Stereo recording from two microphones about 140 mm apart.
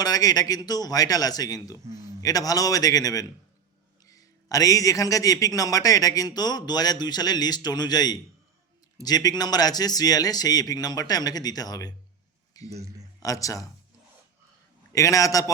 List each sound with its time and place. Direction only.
0.0 s a man's voice: 25° left (ahead or behind)
14.9 s a man's voice: 25° left (ahead or behind)